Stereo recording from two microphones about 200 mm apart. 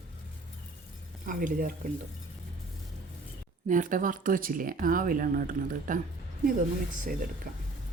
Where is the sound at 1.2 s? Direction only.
40° right (ahead or behind).